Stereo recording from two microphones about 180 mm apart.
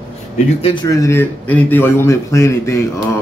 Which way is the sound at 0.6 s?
25° left (ahead or behind).